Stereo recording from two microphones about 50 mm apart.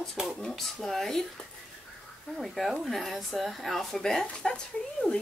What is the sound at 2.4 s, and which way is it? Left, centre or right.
Speech, centre.